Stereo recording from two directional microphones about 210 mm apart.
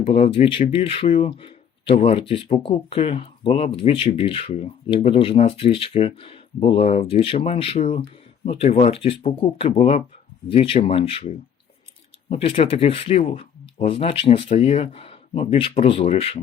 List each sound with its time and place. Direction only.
0.0 s speech: 25° left (ahead or behind)
12.3 s speech: 30° left (ahead or behind)